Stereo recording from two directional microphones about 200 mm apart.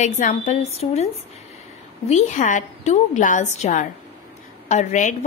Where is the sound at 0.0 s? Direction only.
35° left (ahead or behind).